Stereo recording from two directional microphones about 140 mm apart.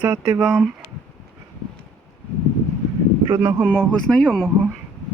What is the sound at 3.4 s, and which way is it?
Speech, 20° right (ahead or behind).